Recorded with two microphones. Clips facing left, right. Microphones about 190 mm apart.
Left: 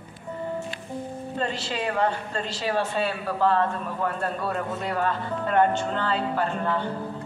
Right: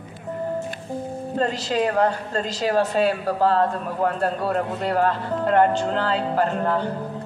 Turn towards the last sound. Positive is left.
turn(degrees=-40)  # may be behind; listen again after turning